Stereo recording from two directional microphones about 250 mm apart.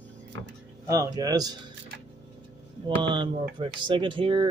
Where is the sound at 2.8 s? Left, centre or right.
Centre.